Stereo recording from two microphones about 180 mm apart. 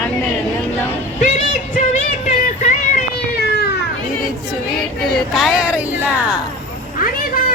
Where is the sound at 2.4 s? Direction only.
50° left (ahead or behind).